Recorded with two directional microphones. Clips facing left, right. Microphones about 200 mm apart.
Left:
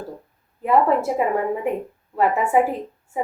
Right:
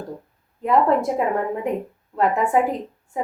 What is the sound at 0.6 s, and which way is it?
A woman's voice, 5° left (ahead or behind).